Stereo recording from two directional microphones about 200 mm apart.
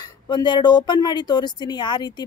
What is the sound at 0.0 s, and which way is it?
Speech, 20° left (ahead or behind).